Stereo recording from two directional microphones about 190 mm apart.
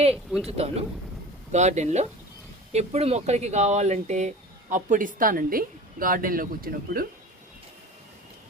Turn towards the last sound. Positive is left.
turn(degrees=-50)  # may be behind; listen again after turning